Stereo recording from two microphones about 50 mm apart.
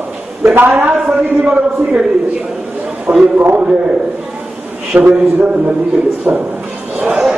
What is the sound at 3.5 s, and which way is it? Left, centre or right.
Speech, right.